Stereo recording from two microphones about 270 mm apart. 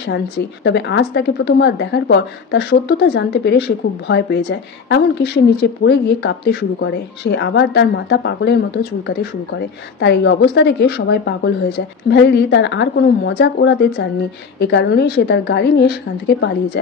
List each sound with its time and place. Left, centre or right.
0.7 s speech: left